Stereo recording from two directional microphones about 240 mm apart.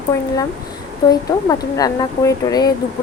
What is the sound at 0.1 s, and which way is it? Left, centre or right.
Speech, centre.